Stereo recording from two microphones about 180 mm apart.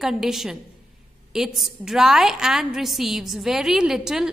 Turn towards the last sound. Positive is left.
turn(degrees=-5)  # may be behind; listen again after turning